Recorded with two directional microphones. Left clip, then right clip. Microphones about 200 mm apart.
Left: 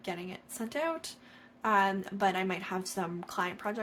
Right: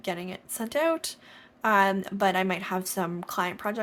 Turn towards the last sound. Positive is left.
turn(degrees=-35)  # may be behind; listen again after turning